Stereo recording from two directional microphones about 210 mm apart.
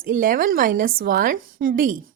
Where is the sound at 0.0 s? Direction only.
40° right (ahead or behind).